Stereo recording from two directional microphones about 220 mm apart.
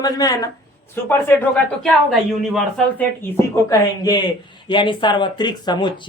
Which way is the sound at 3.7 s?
15° left (ahead or behind).